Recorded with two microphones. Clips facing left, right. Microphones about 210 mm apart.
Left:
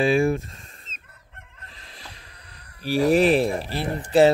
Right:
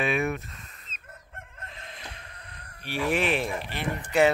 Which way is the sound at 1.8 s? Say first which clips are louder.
Right 1 dB; 35° left (ahead or behind).